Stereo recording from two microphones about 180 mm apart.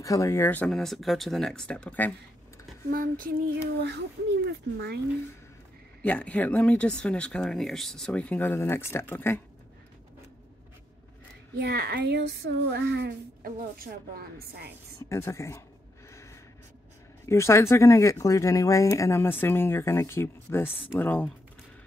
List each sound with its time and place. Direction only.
0.0 s speech: 15° left (ahead or behind)
2.9 s child singing: 55° right (ahead or behind)
6.0 s speech: 5° left (ahead or behind)
11.5 s child singing: 60° right (ahead or behind)
15.0 s speech: 15° left (ahead or behind)
16.1 s snort: 15° left (ahead or behind)
17.3 s speech: 15° left (ahead or behind)